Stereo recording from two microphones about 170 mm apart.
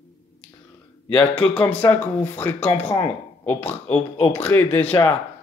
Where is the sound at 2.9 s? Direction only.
15° left (ahead or behind).